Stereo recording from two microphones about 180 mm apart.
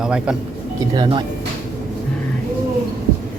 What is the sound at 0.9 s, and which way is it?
Speech, 25° right (ahead or behind).